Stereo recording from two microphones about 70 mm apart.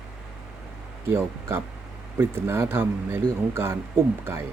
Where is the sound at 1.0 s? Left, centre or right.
Right.